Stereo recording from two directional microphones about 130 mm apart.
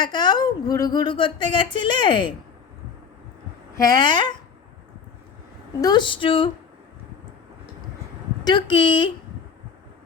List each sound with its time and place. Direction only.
0.0 s speech: 35° left (ahead or behind)
3.8 s speech: 30° left (ahead or behind)
5.8 s speech: 35° left (ahead or behind)
8.4 s speech: 35° left (ahead or behind)